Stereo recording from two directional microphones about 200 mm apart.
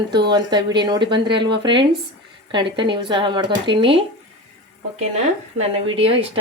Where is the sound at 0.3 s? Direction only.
20° right (ahead or behind).